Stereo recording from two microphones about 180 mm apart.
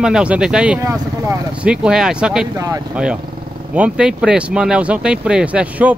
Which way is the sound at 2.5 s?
20° right (ahead or behind).